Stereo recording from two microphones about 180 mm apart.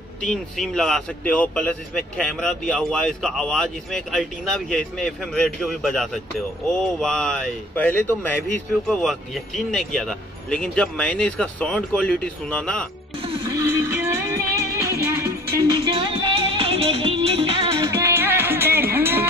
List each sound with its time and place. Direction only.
0.2 s a man's voice: 5° left (ahead or behind)
13.5 s music: 15° right (ahead or behind); by 17.6 s 30° right (ahead or behind)
17.8 s music: 15° right (ahead or behind)